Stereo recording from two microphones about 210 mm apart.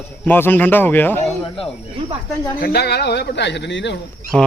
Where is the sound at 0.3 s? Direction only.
10° left (ahead or behind).